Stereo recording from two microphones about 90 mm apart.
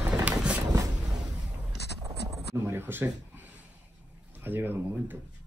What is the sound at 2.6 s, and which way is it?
Speech, 25° right (ahead or behind).